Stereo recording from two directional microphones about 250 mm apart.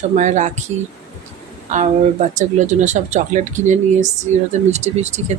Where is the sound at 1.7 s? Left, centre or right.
Right.